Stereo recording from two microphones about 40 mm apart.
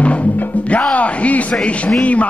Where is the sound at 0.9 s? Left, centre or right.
Left.